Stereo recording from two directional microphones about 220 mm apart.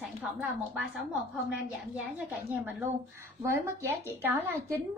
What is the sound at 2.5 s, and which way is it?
A woman's voice, 10° right (ahead or behind).